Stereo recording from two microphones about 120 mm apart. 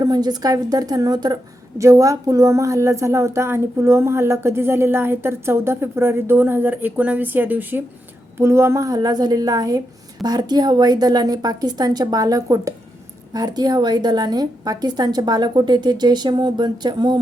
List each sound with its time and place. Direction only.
0.0 s a woman's voice: 35° right (ahead or behind)